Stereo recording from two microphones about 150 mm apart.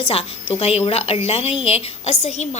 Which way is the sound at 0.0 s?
40° left (ahead or behind).